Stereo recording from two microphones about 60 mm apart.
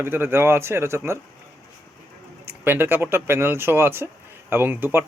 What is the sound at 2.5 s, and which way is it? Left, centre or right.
Speech, right.